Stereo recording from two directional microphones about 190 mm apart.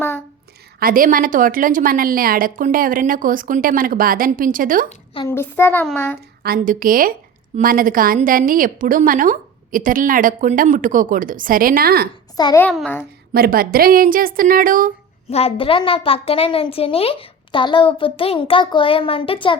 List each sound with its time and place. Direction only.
0.8 s a woman's voice: 50° right (ahead or behind)
5.2 s a child's voice: 15° left (ahead or behind)
6.4 s a woman's voice: 50° right (ahead or behind)
12.4 s a woman's voice: 20° left (ahead or behind)
13.3 s a woman's voice: 50° right (ahead or behind)
15.3 s a woman's voice: 30° left (ahead or behind)